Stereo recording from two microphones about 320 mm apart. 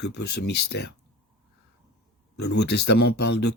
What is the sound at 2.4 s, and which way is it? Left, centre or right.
Speech, left.